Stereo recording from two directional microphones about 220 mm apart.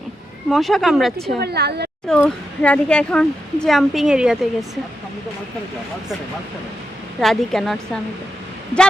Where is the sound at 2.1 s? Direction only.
5° left (ahead or behind).